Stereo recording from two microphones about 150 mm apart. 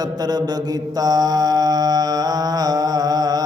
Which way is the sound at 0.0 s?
25° right (ahead or behind).